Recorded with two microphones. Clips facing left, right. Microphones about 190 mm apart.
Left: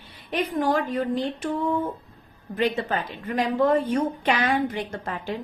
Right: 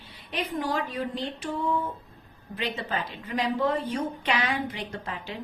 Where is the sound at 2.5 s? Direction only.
50° left (ahead or behind).